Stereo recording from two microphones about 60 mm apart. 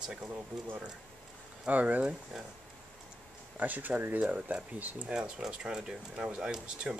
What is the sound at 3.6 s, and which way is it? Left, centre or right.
Speech, right.